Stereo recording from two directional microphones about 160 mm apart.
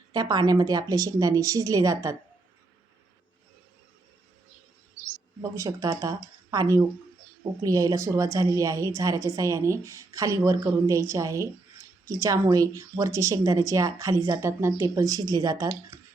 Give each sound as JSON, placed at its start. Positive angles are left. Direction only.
{"t": 0.1, "sound": "a woman's voice", "side_deg": -25}
{"t": 5.4, "sound": "a woman's voice", "side_deg": -20}